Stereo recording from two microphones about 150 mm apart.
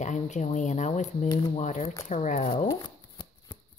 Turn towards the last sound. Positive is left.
turn(degrees=30)  # may be behind; listen again after turning